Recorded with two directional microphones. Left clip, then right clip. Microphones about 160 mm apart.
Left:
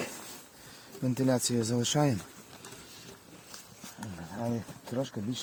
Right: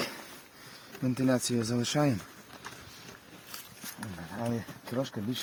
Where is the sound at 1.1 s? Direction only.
60° left (ahead or behind).